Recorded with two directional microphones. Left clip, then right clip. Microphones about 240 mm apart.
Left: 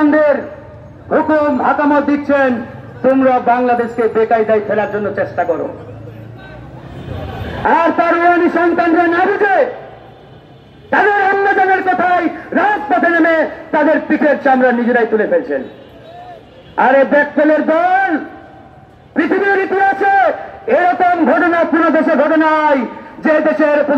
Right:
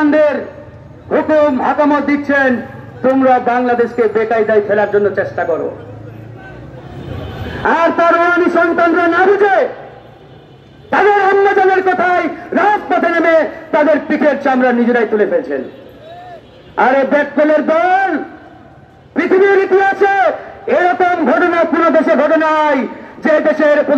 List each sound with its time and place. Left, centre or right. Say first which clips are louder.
0.0 s a sound: even; right
1.0 s a man's voice: right 1 dB; right
7.6 s a man's voice: right 1 dB; right
10.9 s a man's voice: right 1 dB; right
16.7 s a man's voice: left 1 dB; right